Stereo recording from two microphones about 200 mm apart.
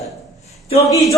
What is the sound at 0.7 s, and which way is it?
Speech, 15° left (ahead or behind).